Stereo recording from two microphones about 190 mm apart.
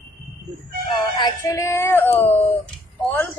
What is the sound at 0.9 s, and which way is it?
A woman's voice, 20° left (ahead or behind).